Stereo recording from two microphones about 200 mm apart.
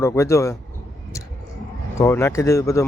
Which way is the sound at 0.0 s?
15° left (ahead or behind).